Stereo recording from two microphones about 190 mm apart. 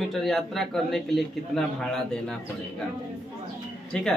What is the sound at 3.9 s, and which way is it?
Speech, 5° left (ahead or behind).